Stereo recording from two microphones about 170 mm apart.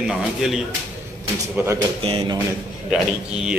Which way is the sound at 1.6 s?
10° right (ahead or behind).